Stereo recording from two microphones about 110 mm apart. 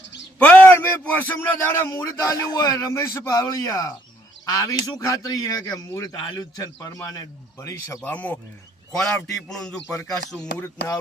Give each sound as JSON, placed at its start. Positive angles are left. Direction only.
{"t": 0.3, "sound": "a man's voice", "side_deg": 15}
{"t": 6.1, "sound": "a man's voice", "side_deg": 45}
{"t": 8.0, "sound": "a man's voice", "side_deg": 15}